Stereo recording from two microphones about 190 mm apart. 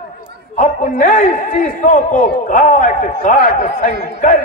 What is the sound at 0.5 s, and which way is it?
A man's voice, 40° left (ahead or behind).